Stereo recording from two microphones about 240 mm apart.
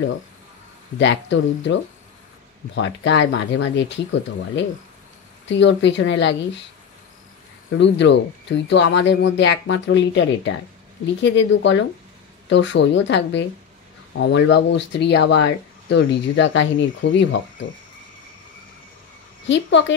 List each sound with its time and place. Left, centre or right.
0.9 s speech: left
7.7 s speech: left
19.4 s speech: left